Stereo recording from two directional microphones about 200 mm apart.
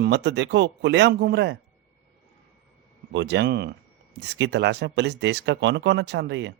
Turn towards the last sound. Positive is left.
turn(degrees=-60)  # may be behind; listen again after turning